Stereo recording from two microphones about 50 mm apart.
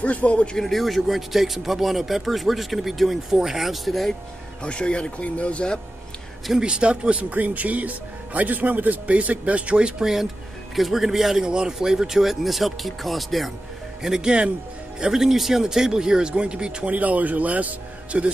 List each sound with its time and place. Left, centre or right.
0.0 s speech: left
0.6 s speech: centre
4.6 s speech: left
6.6 s speech: centre
14.0 s speech: centre
16.9 s a man's voice: right